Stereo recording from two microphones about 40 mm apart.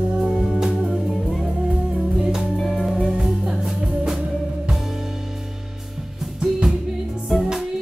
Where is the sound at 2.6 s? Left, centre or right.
Centre.